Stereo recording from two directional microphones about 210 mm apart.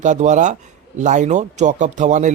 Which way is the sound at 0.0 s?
35° right (ahead or behind).